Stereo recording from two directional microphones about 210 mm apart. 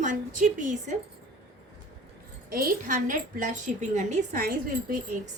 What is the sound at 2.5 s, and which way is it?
A woman's voice, 45° right (ahead or behind).